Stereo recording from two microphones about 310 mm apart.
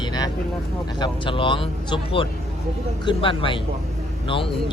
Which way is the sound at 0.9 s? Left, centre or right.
Centre.